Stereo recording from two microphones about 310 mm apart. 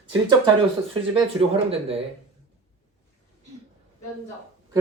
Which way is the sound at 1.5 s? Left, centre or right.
Centre.